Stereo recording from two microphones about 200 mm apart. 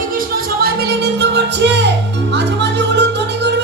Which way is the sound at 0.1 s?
45° right (ahead or behind).